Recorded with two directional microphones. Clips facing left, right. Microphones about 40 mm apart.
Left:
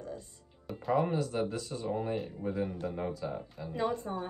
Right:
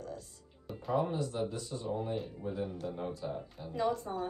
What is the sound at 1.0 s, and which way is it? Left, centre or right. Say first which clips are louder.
Speech: left 3 dB; left.